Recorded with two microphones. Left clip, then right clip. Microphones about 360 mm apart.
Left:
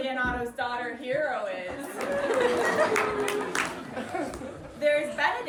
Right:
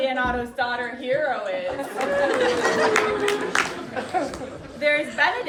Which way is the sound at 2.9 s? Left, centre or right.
Right.